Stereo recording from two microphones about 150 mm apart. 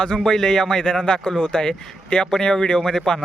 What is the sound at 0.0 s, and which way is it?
Speech, 5° left (ahead or behind).